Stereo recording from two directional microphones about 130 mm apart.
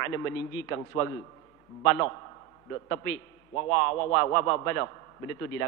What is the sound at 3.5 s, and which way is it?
A man's voice, 20° left (ahead or behind).